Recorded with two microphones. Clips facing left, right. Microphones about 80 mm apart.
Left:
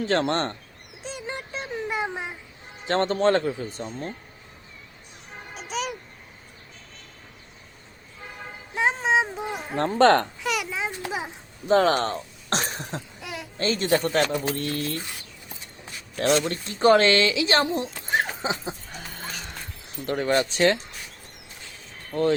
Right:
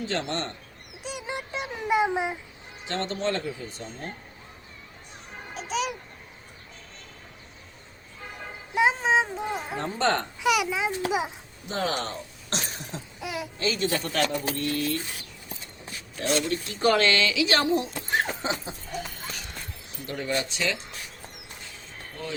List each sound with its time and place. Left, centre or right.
0.0 s speech: left
1.0 s a sound: centre
2.8 s speech: left
5.5 s a sound: centre
8.7 s a sound: centre
9.7 s speech: left
10.4 s a child's voice: centre
11.7 s speech: left
13.2 s a sound: centre
13.6 s speech: left
16.6 s speech: left
18.1 s dog: centre
20.1 s speech: left
22.1 s speech: left